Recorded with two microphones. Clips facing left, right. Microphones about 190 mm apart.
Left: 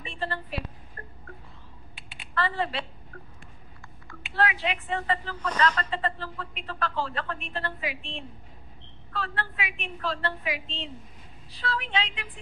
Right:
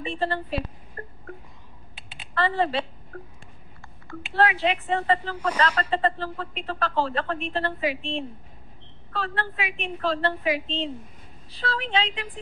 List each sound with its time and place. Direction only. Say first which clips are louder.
0.0 s a woman's voice: right 7 dB; 35° right (ahead or behind)
1.0 s a sound: right 7 dB; 30° right (ahead or behind)
2.0 s typing: right 3 dB; 25° right (ahead or behind)
3.8 s a woman's voice: right 9 dB; 35° right (ahead or behind)